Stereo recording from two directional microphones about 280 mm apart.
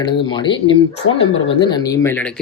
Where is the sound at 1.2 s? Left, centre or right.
Left.